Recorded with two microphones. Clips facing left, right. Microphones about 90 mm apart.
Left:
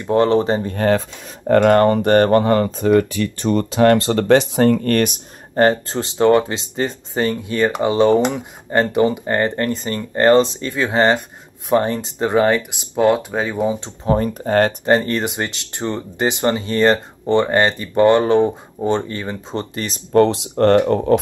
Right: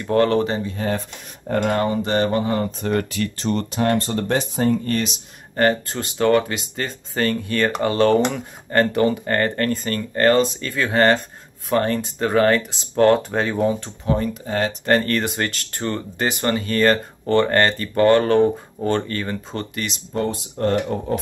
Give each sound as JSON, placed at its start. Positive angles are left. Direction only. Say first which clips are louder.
{"t": 0.0, "sound": "speech", "louder": "left 3 dB", "side_deg": 20}
{"t": 0.7, "sound": "speech", "louder": "left 7 dB", "side_deg": 65}
{"t": 3.8, "sound": "speech", "louder": "left 7 dB", "side_deg": 90}
{"t": 5.6, "sound": "speech", "louder": "left 4 dB", "side_deg": 30}
{"t": 13.7, "sound": "speech", "louder": "left 3 dB", "side_deg": 20}
{"t": 14.1, "sound": "speech", "louder": "left 6 dB", "side_deg": 45}
{"t": 14.9, "sound": "speech", "louder": "left 2 dB", "side_deg": 20}
{"t": 19.5, "sound": "speech", "louder": "left 3 dB", "side_deg": 30}
{"t": 20.1, "sound": "speech", "louder": "left 12 dB", "side_deg": 75}